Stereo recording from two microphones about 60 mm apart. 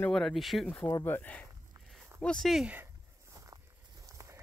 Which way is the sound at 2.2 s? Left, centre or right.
Centre.